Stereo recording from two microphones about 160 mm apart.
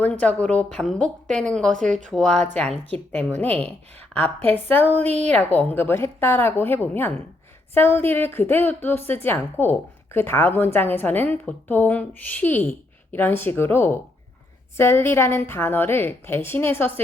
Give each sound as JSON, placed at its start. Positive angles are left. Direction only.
{"t": 0.0, "sound": "a woman's voice", "side_deg": 10}
{"t": 5.0, "sound": "a woman's voice", "side_deg": -45}
{"t": 5.3, "sound": "a woman's voice", "side_deg": 10}